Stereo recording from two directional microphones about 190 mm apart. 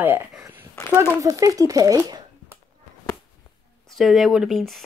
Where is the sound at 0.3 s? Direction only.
5° right (ahead or behind).